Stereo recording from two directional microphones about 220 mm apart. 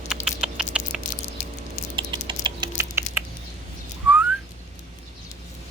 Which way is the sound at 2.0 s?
20° right (ahead or behind).